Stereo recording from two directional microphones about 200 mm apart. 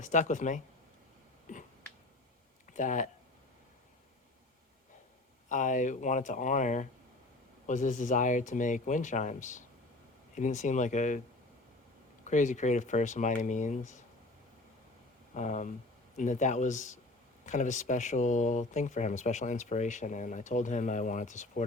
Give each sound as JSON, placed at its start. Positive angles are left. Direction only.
{"t": 0.0, "sound": "speech", "side_deg": 40}
{"t": 1.5, "sound": "finger snapping", "side_deg": 40}
{"t": 2.7, "sound": "speech", "side_deg": 40}
{"t": 5.5, "sound": "speech", "side_deg": 40}
{"t": 12.2, "sound": "speech", "side_deg": 40}
{"t": 15.4, "sound": "speech", "side_deg": 35}